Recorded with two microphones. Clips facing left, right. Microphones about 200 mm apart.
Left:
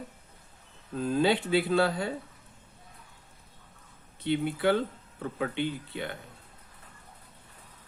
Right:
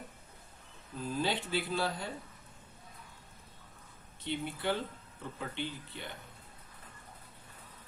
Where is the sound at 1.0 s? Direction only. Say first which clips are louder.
Left 9 dB; 70° left (ahead or behind).